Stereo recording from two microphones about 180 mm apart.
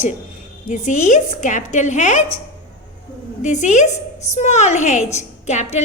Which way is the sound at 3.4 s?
40° left (ahead or behind).